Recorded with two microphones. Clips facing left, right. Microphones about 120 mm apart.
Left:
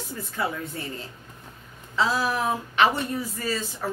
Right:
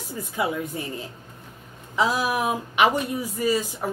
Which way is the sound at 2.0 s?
15° right (ahead or behind).